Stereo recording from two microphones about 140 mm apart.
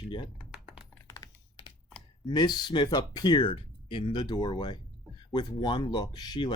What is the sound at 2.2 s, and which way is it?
Speech, 30° left (ahead or behind).